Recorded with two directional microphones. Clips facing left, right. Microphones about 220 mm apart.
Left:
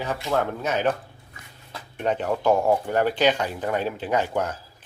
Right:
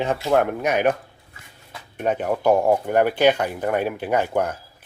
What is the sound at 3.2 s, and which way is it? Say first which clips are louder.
Speech: right 4 dB; 55° right (ahead or behind).